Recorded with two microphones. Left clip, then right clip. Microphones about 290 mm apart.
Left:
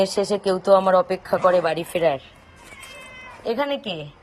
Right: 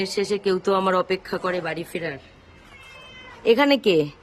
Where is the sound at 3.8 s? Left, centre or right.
Right.